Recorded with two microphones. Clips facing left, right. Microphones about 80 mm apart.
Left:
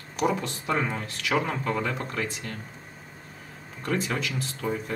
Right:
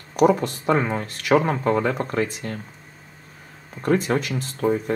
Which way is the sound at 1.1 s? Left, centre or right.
Right.